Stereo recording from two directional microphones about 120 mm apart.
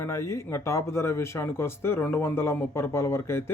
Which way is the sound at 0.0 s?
25° left (ahead or behind).